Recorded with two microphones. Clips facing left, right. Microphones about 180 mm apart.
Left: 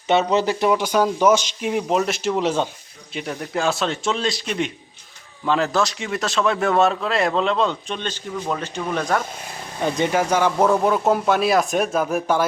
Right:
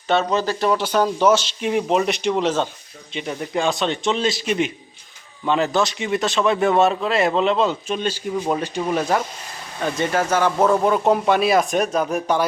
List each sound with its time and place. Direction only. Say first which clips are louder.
0.1 s a man's voice: left 1 dB; 20° left (ahead or behind)
3.1 s a man's voice: right 1 dB; centre (ahead or behind)
9.8 s a man's voice: left 1 dB; 15° left (ahead or behind)